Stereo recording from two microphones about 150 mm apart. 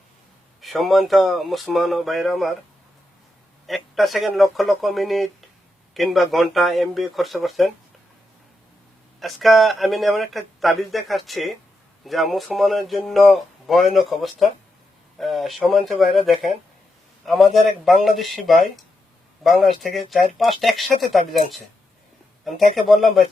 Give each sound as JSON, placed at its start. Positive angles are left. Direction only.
{"t": 0.6, "sound": "speech", "side_deg": 0}
{"t": 3.7, "sound": "speech", "side_deg": 0}
{"t": 9.2, "sound": "speech", "side_deg": 0}
{"t": 22.4, "sound": "speech", "side_deg": 0}